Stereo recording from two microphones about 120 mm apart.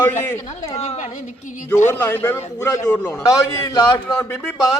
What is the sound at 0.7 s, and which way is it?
Speech, 65° left (ahead or behind).